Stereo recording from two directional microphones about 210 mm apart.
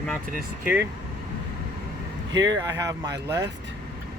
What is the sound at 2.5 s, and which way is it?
Speech, 15° right (ahead or behind).